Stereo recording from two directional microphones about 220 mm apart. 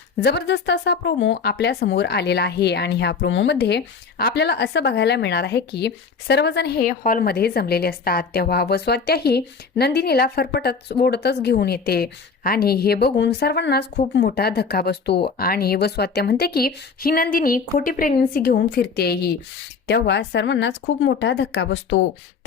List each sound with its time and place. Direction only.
0.2 s speech: 50° left (ahead or behind)